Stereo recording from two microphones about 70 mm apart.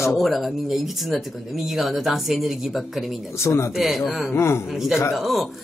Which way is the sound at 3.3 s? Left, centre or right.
Left.